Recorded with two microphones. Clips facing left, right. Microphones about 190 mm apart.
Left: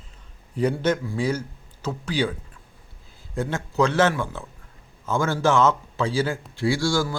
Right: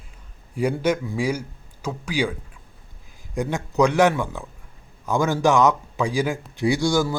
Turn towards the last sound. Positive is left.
turn(degrees=-20)  # may be behind; listen again after turning